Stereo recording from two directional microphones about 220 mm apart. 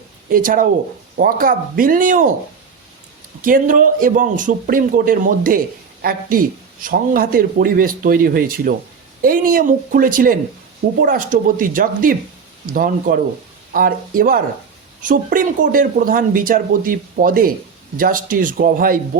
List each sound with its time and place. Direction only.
0.3 s speech: 40° right (ahead or behind)
3.4 s speech: 40° right (ahead or behind)